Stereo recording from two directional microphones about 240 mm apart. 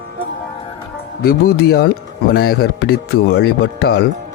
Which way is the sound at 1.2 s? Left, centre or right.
Left.